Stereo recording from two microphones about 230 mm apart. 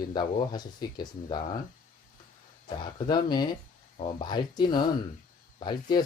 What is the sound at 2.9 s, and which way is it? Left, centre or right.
Speech, centre.